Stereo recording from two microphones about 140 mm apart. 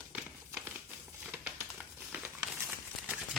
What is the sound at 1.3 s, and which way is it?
Crumpling, 10° right (ahead or behind).